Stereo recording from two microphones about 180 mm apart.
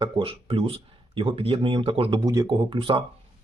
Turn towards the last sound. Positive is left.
turn(degrees=-30)  # may be behind; listen again after turning